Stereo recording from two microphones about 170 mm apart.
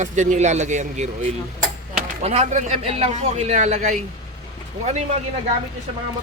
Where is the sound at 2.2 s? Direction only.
40° right (ahead or behind).